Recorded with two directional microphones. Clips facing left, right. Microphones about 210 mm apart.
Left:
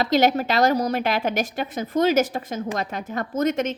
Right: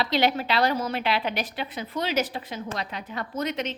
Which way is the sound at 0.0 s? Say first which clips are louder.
Left 5 dB; 45° left (ahead or behind).